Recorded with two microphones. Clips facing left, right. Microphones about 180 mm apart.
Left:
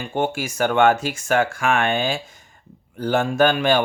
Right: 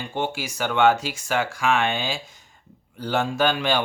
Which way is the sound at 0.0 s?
50° left (ahead or behind).